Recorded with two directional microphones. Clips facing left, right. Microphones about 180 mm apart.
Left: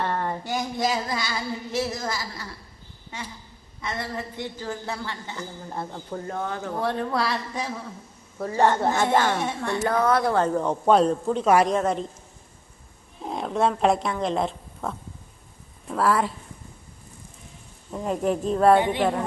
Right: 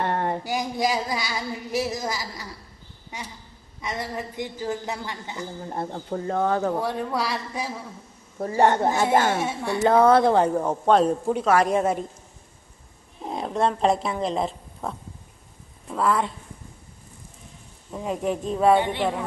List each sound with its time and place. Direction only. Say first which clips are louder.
0.0 s a sound: right 2 dB; 20° right (ahead or behind)
0.4 s speech: right 1 dB; 10° right (ahead or behind)
5.6 s speech: right 4 dB; 25° right (ahead or behind)
6.8 s speech: left 1 dB; 10° right (ahead or behind)
9.8 s speech: right 6 dB; 25° right (ahead or behind)
10.4 s speech: even; 10° right (ahead or behind)
11.7 s speech: right 1 dB; 10° right (ahead or behind)
13.2 s speech: even; centre (ahead or behind)
17.9 s speech: left 2 dB; centre (ahead or behind)
18.8 s a woman's voice: left 2 dB; 15° left (ahead or behind)